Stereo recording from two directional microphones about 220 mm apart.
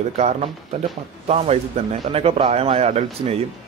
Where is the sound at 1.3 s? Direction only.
30° right (ahead or behind).